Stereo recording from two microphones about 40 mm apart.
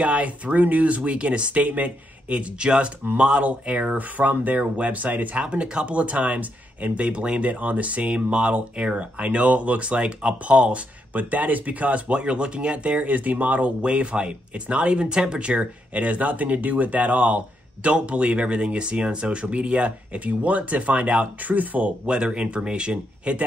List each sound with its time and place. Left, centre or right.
0.0 s speech: right
2.6 s speech: right
5.4 s speech: right
22.0 s speech: right